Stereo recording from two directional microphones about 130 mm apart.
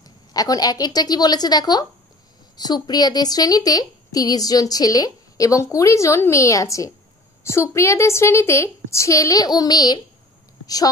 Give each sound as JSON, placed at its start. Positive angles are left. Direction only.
{"t": 0.0, "sound": "a woman's voice", "side_deg": 30}